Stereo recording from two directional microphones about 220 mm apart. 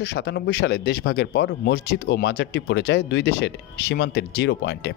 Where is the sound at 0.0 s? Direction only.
50° left (ahead or behind).